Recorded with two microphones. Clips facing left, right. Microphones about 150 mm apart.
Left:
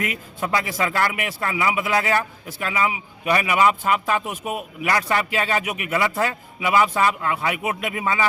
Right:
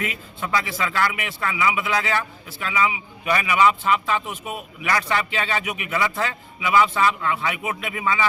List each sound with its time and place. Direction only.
0.0 s a man's voice: 40° left (ahead or behind)